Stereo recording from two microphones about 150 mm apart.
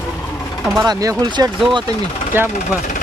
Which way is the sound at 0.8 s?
25° right (ahead or behind).